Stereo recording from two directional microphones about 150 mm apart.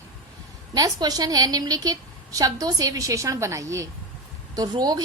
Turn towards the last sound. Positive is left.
turn(degrees=-25)  # may be behind; listen again after turning